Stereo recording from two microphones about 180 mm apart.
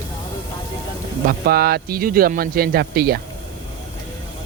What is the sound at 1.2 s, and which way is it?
Speech, 60° right (ahead or behind).